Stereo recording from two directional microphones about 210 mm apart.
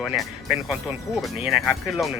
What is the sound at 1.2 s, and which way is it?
Speech, centre (ahead or behind).